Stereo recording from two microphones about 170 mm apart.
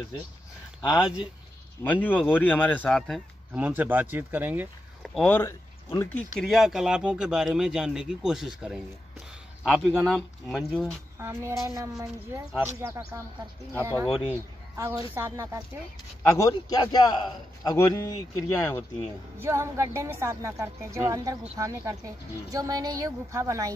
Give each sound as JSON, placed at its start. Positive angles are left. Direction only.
{"t": 1.9, "sound": "speech", "side_deg": 10}
{"t": 3.6, "sound": "a woman's voice", "side_deg": -10}
{"t": 5.0, "sound": "speech", "side_deg": 5}
{"t": 6.4, "sound": "speech", "side_deg": 0}
{"t": 11.1, "sound": "a woman's voice", "side_deg": -15}
{"t": 16.2, "sound": "a man's voice", "side_deg": 20}
{"t": 19.4, "sound": "a woman's voice", "side_deg": -15}